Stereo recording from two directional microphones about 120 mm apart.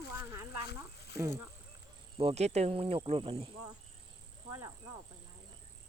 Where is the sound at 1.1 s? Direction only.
25° right (ahead or behind).